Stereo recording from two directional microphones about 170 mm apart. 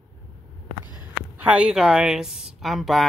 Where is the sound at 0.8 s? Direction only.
25° left (ahead or behind).